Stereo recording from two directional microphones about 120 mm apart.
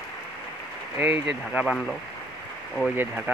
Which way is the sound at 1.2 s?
5° right (ahead or behind).